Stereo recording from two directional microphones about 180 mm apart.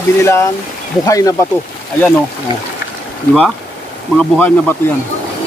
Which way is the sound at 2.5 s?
25° right (ahead or behind).